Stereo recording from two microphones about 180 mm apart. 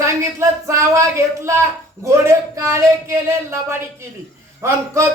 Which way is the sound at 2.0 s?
15° right (ahead or behind).